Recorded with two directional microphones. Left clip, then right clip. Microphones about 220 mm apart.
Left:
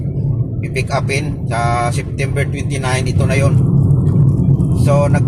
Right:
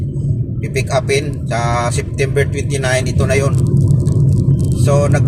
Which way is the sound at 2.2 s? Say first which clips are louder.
Right 5 dB; 25° right (ahead or behind).